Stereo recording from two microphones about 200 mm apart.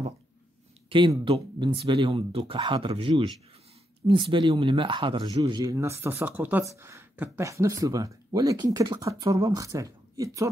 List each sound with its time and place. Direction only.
0.8 s speech: 25° right (ahead or behind)